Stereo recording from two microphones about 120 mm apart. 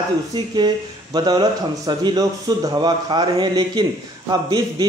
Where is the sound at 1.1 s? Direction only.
35° right (ahead or behind).